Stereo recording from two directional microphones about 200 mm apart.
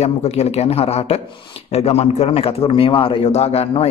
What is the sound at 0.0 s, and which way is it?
A man's voice, 35° left (ahead or behind).